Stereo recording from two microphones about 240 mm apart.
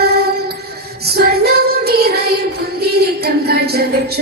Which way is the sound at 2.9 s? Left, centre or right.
Right.